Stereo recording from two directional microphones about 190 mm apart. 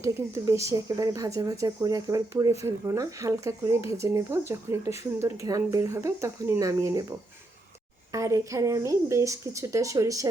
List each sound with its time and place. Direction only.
0.0 s speech: 15° right (ahead or behind)
8.1 s speech: 15° right (ahead or behind)